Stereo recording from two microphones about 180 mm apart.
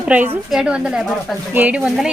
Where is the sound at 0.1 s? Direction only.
5° right (ahead or behind).